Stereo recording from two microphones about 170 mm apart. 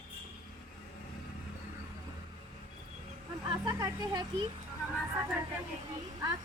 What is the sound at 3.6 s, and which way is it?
Speech, 20° right (ahead or behind).